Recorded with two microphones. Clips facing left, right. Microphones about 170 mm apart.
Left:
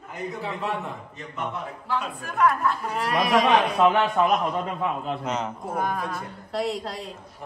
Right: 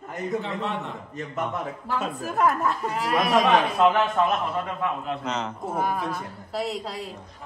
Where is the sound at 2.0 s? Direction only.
Centre (ahead or behind).